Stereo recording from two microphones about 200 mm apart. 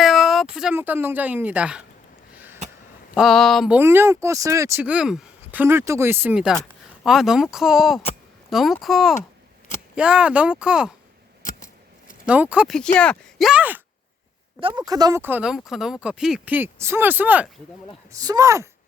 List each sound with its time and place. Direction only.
0.0 s a sound: centre (ahead or behind)
3.2 s speech: centre (ahead or behind)
12.2 s speech: 5° right (ahead or behind)
14.6 s speech: 20° right (ahead or behind)